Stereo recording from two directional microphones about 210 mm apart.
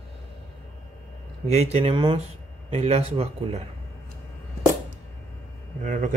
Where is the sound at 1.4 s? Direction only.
30° right (ahead or behind).